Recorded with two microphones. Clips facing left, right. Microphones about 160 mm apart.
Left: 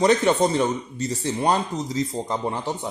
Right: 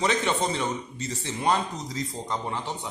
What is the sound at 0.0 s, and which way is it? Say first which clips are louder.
Speech: left 7 dB; 40° left (ahead or behind).